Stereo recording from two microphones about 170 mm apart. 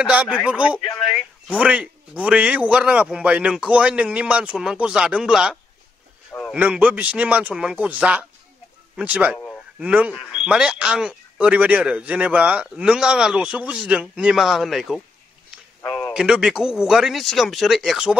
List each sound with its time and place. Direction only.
0.0 s a man's voice: 5° right (ahead or behind)
15.8 s a sound: 20° left (ahead or behind)
16.1 s a man's voice: 5° right (ahead or behind)